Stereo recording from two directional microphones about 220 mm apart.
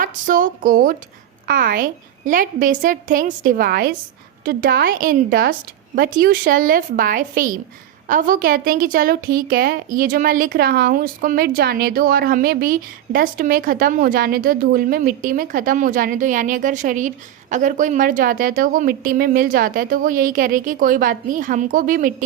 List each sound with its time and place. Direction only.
0.0 s a woman's voice: 40° right (ahead or behind)